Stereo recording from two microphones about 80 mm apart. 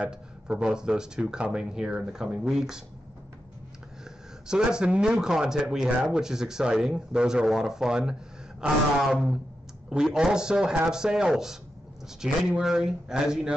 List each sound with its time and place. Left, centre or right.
0.0 s speech: centre
4.5 s speech: centre